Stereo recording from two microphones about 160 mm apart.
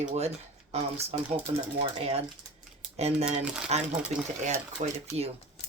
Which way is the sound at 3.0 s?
40° right (ahead or behind).